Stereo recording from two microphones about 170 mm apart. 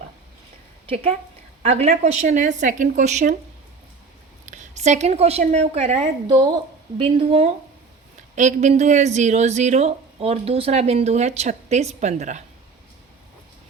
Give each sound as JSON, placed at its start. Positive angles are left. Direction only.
{"t": 1.6, "sound": "a woman's voice", "side_deg": -40}
{"t": 4.4, "sound": "a woman's voice", "side_deg": -45}
{"t": 8.4, "sound": "a woman's voice", "side_deg": -45}